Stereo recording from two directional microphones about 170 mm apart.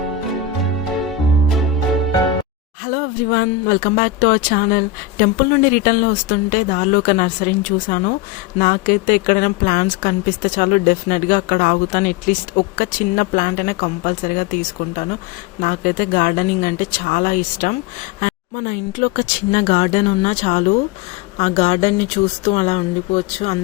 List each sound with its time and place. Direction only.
2.8 s speech: 60° left (ahead or behind); by 23.6 s 40° left (ahead or behind)